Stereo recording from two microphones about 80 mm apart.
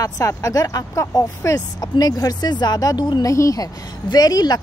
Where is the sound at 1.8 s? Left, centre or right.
Left.